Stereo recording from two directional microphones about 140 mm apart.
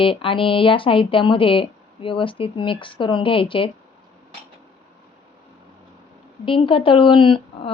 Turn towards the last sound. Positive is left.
turn(degrees=35)  # may be behind; listen again after turning